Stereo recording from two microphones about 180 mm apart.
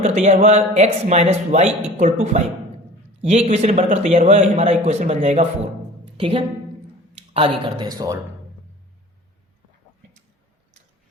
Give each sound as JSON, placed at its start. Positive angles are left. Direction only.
{"t": 0.0, "sound": "a man's voice", "side_deg": -40}
{"t": 6.1, "sound": "a woman's voice", "side_deg": -30}